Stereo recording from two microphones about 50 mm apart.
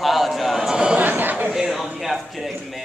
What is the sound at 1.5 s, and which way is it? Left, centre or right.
Speech, centre.